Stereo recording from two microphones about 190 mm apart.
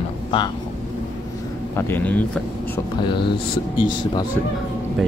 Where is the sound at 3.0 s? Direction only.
25° left (ahead or behind).